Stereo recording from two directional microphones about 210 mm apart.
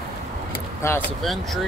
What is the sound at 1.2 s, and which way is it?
Speech, centre (ahead or behind).